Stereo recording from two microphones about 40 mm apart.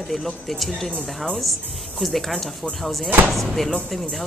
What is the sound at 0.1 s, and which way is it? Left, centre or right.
A woman's voice, centre.